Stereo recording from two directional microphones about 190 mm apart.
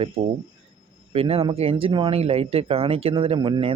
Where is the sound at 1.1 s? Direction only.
30° right (ahead or behind).